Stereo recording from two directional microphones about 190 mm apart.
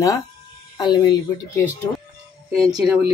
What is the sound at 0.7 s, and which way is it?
Speech, 20° left (ahead or behind).